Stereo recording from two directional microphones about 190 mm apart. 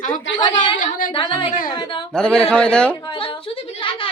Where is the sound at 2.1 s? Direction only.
5° left (ahead or behind).